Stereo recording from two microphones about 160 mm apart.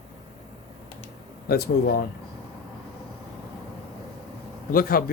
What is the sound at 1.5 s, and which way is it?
Speech, 75° left (ahead or behind).